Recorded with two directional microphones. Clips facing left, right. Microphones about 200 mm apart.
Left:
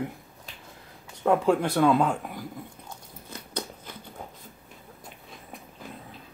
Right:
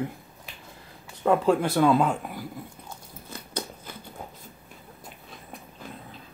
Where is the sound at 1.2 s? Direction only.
Centre (ahead or behind).